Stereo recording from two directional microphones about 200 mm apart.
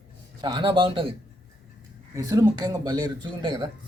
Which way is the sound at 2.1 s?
15° right (ahead or behind).